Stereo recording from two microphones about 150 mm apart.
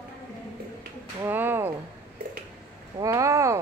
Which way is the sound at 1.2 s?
15° right (ahead or behind).